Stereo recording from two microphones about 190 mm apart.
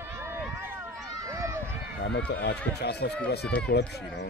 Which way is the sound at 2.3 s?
60° left (ahead or behind).